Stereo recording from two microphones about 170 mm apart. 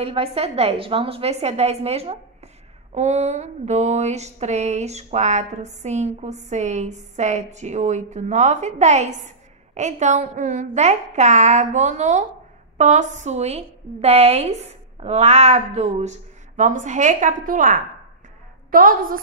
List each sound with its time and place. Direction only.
0.0 s a woman's voice: 35° right (ahead or behind); by 19.1 s 55° right (ahead or behind)